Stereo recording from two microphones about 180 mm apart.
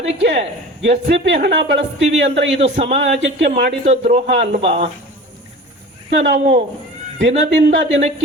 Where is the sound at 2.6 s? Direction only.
35° right (ahead or behind).